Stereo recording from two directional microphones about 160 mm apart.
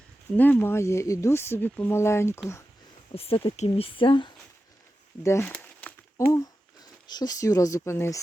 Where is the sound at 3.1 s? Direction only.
35° left (ahead or behind).